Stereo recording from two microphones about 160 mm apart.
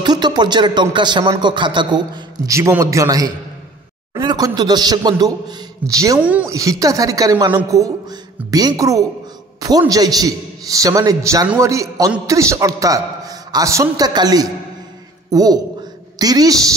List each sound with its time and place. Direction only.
0.0 s music: 25° right (ahead or behind)
0.9 s a man's voice: 30° right (ahead or behind)